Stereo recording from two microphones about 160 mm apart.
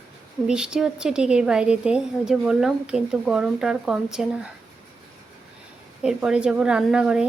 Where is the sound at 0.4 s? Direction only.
5° right (ahead or behind).